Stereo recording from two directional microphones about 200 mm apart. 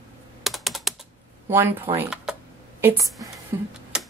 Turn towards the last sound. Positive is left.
turn(degrees=-5)  # may be behind; listen again after turning